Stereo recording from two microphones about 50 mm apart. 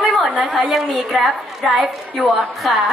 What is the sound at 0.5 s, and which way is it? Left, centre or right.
Speech, centre.